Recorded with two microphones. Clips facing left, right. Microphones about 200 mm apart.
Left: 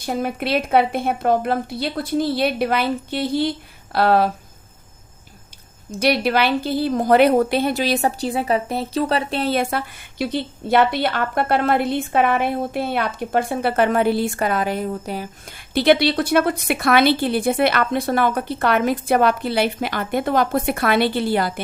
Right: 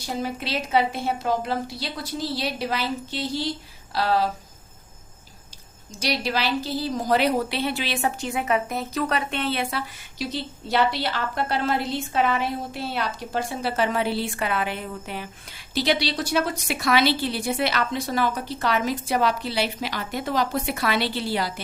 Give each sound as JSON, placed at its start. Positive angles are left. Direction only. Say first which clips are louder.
{"t": 0.0, "sound": "a woman's voice", "louder": "left 5 dB", "side_deg": 55}
{"t": 5.9, "sound": "a woman's voice", "louder": "left 8 dB", "side_deg": 55}